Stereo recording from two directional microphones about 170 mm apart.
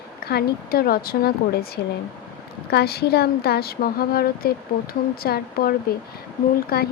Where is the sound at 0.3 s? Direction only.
65° left (ahead or behind).